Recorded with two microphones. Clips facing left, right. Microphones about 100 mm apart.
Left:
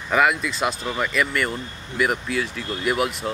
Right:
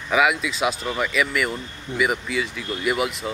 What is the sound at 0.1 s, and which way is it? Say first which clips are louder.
Speech: even; 5° right (ahead or behind).